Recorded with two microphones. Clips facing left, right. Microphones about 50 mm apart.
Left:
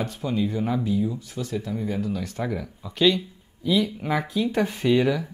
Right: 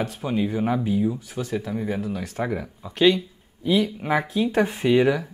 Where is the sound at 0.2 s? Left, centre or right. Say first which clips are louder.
Right 1 dB; right.